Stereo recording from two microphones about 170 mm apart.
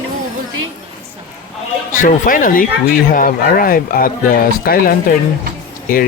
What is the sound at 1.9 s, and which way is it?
Speech, 50° left (ahead or behind).